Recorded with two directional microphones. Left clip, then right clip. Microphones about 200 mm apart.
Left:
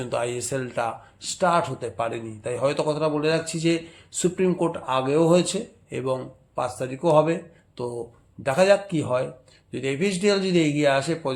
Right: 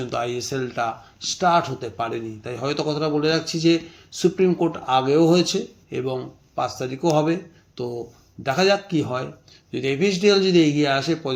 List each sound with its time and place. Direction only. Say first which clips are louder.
0.0 s speech: right 1 dB; 20° left (ahead or behind)